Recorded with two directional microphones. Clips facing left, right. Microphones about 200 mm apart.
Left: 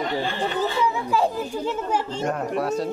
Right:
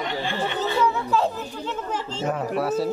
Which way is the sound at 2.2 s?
Centre (ahead or behind).